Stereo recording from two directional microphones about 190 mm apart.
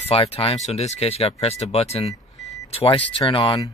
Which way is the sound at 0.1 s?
30° left (ahead or behind).